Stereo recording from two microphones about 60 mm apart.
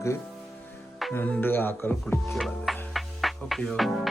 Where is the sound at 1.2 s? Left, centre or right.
Left.